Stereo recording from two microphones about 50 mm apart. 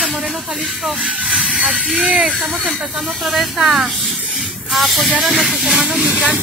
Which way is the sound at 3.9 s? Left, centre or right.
Centre.